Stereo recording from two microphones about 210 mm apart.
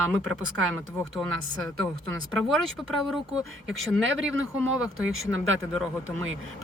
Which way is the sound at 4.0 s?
65° right (ahead or behind).